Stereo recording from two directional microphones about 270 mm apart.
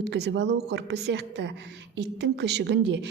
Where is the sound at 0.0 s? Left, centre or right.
Right.